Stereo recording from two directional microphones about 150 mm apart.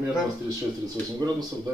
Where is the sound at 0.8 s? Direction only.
25° right (ahead or behind).